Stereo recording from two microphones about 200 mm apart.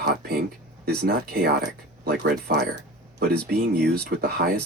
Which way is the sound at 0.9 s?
50° right (ahead or behind).